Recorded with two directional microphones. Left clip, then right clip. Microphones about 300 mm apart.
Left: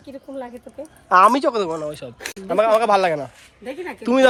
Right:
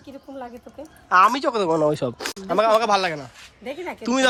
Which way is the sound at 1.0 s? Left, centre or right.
Centre.